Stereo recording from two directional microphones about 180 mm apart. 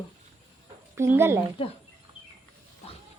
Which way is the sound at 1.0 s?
15° right (ahead or behind).